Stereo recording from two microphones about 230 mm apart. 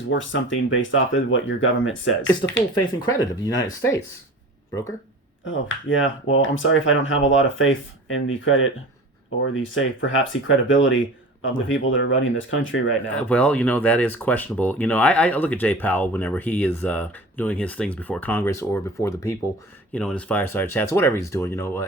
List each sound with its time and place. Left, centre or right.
0.1 s speech: left
2.2 s speech: centre
5.5 s speech: left
13.1 s speech: centre